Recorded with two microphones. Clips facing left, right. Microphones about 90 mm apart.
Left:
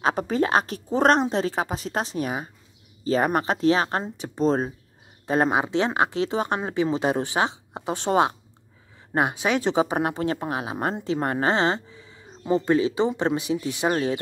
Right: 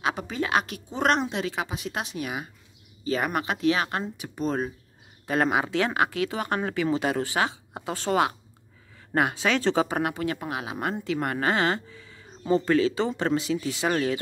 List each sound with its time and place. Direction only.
0.0 s speech: 40° left (ahead or behind); by 14.2 s 25° left (ahead or behind)